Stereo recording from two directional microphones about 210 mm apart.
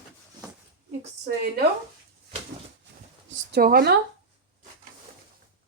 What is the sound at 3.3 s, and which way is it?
Speech, 45° right (ahead or behind).